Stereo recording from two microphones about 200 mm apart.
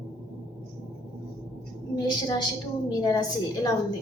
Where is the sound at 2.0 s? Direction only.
20° left (ahead or behind).